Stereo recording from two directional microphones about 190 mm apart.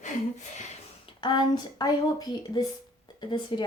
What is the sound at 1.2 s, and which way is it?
Speech, 25° left (ahead or behind).